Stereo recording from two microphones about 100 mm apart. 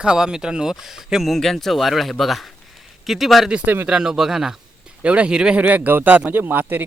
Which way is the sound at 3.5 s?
20° right (ahead or behind).